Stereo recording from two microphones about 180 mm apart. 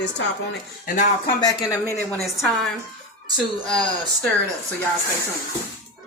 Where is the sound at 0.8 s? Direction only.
45° left (ahead or behind).